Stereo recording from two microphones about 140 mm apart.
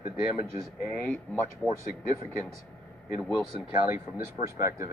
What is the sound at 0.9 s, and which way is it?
Speech, 15° left (ahead or behind).